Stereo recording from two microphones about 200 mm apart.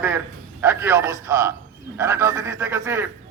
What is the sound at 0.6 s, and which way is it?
Speech, 10° right (ahead or behind).